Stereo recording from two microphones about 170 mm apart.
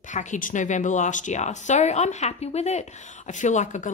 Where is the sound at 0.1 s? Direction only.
45° left (ahead or behind).